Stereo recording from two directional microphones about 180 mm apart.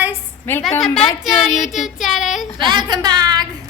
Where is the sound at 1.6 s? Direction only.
Centre (ahead or behind).